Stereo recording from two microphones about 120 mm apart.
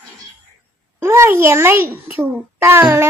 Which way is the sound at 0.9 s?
20° right (ahead or behind).